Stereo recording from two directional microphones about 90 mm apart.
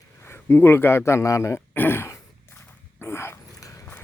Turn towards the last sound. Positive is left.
turn(degrees=40)  # may be behind; listen again after turning